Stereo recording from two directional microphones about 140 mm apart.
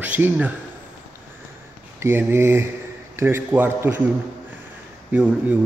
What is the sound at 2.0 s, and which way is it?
Speech, 15° right (ahead or behind).